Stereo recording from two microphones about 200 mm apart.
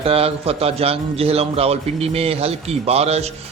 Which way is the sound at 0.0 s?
30° right (ahead or behind).